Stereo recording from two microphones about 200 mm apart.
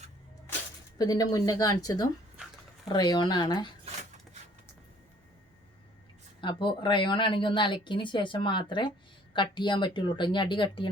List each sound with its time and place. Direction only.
0.9 s speech: 20° left (ahead or behind)
6.4 s speech: 25° left (ahead or behind)